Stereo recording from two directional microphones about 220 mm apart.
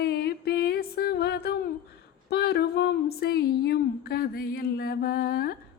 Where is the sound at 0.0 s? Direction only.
50° left (ahead or behind).